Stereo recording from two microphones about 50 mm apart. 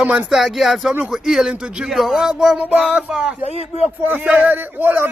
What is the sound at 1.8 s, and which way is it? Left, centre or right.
Speech, centre.